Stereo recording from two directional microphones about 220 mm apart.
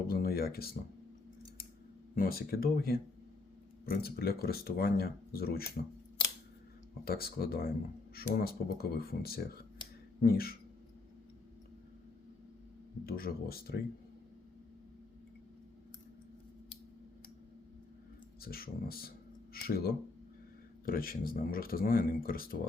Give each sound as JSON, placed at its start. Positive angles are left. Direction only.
{"t": 0.1, "sound": "speech", "side_deg": 45}
{"t": 2.1, "sound": "speech", "side_deg": 40}
{"t": 7.0, "sound": "speech", "side_deg": 45}
{"t": 13.1, "sound": "speech", "side_deg": 40}
{"t": 18.4, "sound": "speech", "side_deg": 45}